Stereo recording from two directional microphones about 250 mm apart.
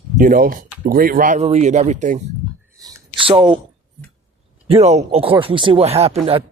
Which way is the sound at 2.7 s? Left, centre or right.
Centre.